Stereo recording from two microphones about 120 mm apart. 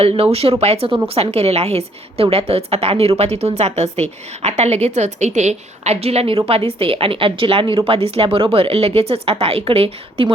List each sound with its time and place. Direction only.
0.0 s a woman's voice: 55° right (ahead or behind)